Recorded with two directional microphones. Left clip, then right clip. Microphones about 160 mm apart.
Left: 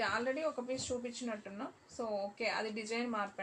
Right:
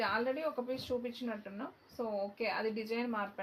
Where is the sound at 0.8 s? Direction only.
30° right (ahead or behind).